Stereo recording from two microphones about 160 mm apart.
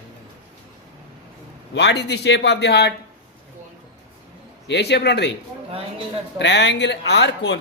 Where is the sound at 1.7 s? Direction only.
90° left.